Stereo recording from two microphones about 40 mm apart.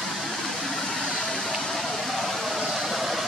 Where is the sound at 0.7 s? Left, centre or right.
Centre.